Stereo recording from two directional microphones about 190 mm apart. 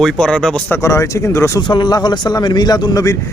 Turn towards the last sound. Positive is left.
turn(degrees=20)  # may be behind; listen again after turning